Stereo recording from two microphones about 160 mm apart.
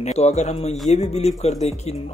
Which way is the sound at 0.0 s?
45° left (ahead or behind).